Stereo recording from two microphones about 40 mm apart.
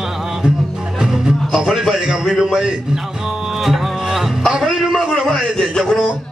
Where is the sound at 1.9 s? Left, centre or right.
Centre.